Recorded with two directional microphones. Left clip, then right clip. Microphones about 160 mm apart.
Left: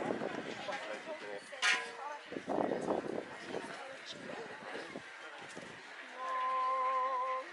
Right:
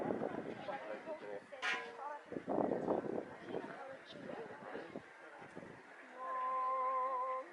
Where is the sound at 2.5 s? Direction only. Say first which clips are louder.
Left 2 dB; 35° right (ahead or behind).